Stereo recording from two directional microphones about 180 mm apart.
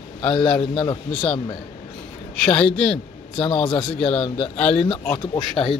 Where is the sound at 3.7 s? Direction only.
25° left (ahead or behind).